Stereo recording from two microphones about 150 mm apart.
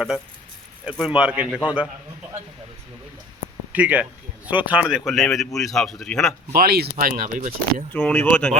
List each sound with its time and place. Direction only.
0.9 s a man's voice: 5° right (ahead or behind)
3.7 s speech: 10° right (ahead or behind)
6.5 s speech: 85° right; by 7.9 s 60° right (ahead or behind)
7.9 s speech: 10° left (ahead or behind)